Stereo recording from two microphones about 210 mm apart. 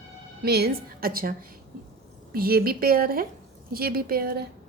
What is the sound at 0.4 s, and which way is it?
Speech, 50° right (ahead or behind).